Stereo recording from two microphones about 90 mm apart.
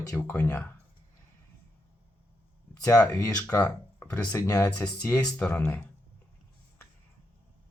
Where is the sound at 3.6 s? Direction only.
15° left (ahead or behind).